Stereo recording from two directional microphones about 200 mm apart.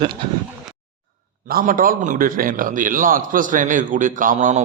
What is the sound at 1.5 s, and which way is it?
A man's voice, 45° right (ahead or behind).